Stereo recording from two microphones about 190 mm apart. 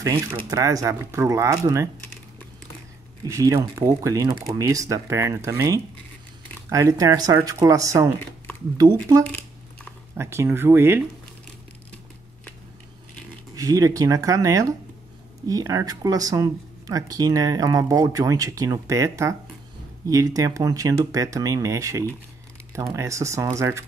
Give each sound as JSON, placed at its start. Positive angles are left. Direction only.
{"t": 0.0, "sound": "speech", "side_deg": -15}
{"t": 3.3, "sound": "speech", "side_deg": -15}
{"t": 8.2, "sound": "a sound", "side_deg": 10}
{"t": 10.1, "sound": "speech", "side_deg": -15}
{"t": 13.6, "sound": "speech", "side_deg": -20}